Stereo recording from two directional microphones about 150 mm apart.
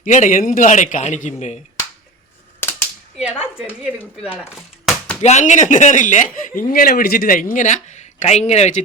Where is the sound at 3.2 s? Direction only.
5° right (ahead or behind).